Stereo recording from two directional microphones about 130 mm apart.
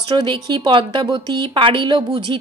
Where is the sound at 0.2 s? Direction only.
40° right (ahead or behind).